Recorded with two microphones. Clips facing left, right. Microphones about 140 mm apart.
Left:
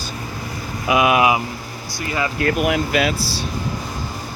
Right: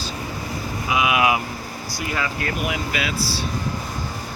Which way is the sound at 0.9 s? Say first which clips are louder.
Left 5 dB; 55° left (ahead or behind).